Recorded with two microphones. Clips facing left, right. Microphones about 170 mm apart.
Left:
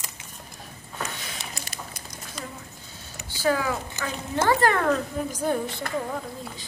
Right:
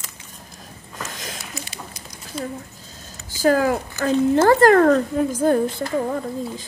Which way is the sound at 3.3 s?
45° right (ahead or behind).